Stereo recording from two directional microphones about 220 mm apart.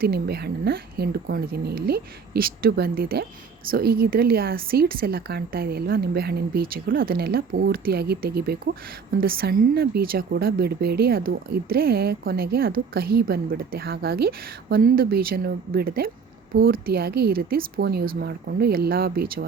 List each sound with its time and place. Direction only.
0.0 s speech: 45° right (ahead or behind)